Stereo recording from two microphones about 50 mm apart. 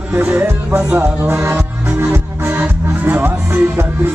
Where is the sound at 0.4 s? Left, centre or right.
Right.